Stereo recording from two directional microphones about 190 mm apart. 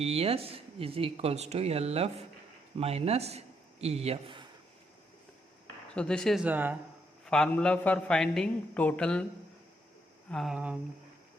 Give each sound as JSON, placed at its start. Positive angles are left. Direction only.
{"t": 0.0, "sound": "a man's voice", "side_deg": -30}
{"t": 5.9, "sound": "a man's voice", "side_deg": 5}
{"t": 7.3, "sound": "a man's voice", "side_deg": 5}
{"t": 10.3, "sound": "a man's voice", "side_deg": -5}